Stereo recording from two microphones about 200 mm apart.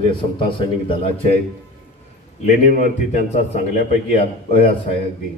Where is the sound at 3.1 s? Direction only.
35° left (ahead or behind).